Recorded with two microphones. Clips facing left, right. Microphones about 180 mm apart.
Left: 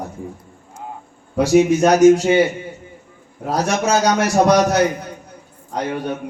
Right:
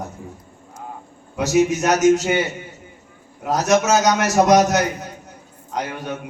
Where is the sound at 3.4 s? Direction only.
35° left (ahead or behind).